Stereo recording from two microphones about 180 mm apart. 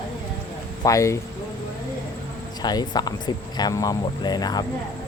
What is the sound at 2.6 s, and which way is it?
Speech, 25° left (ahead or behind).